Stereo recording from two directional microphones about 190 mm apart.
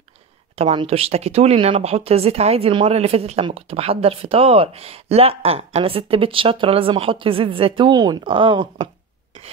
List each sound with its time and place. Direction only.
0.6 s speech: 30° right (ahead or behind)